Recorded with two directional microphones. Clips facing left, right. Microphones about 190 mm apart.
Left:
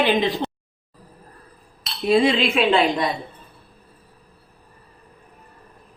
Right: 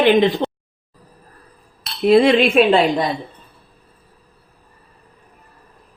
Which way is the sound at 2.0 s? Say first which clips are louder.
Right 6 dB; 60° right (ahead or behind).